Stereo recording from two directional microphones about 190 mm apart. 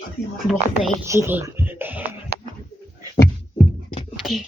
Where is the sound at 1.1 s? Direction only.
15° right (ahead or behind).